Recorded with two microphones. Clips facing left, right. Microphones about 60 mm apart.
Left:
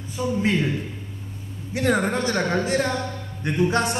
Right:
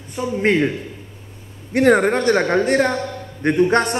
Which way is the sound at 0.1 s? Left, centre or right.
Right.